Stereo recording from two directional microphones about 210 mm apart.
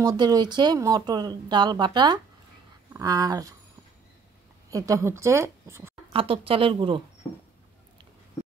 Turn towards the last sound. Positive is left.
turn(degrees=-25)  # may be behind; listen again after turning